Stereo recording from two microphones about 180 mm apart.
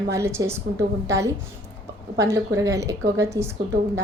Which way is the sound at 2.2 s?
15° right (ahead or behind).